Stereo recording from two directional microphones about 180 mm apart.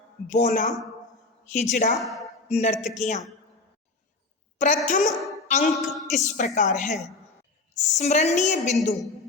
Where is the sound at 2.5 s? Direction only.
35° left (ahead or behind).